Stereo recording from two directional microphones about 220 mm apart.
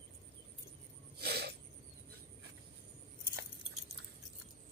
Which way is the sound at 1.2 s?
45° right (ahead or behind).